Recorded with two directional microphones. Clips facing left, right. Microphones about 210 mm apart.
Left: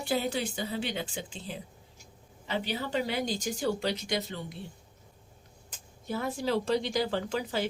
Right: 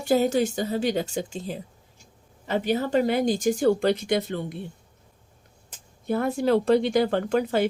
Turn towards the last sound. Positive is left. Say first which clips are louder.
# right 9 dB
turn(degrees=-55)  # may be behind; listen again after turning